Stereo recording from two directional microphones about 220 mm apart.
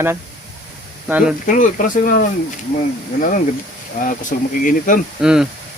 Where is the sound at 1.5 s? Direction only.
35° left (ahead or behind).